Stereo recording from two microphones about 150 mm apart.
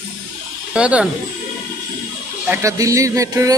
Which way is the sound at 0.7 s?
10° right (ahead or behind).